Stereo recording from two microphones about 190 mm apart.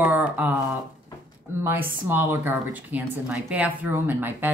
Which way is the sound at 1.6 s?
10° right (ahead or behind).